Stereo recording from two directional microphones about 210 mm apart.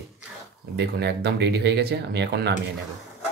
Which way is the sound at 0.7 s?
50° right (ahead or behind).